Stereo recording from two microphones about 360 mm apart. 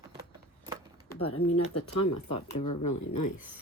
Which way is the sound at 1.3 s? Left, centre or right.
Left.